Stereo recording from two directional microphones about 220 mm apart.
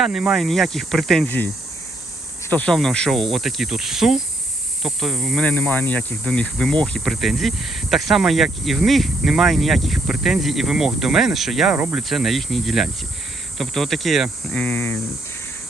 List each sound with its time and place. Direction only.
0.0 s speech: centre (ahead or behind)
2.5 s speech: 5° left (ahead or behind)